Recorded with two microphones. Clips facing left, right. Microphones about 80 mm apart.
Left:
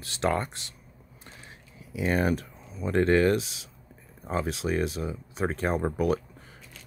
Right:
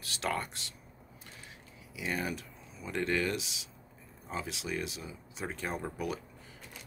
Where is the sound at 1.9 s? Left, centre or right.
Left.